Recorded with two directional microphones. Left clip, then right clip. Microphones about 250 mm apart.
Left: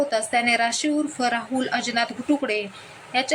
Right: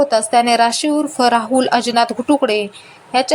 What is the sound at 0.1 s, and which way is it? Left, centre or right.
A woman's voice, centre.